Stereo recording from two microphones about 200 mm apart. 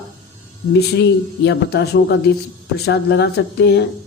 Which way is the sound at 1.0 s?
60° left (ahead or behind).